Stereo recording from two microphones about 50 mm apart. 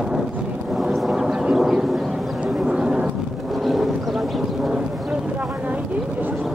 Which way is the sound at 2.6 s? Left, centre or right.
Centre.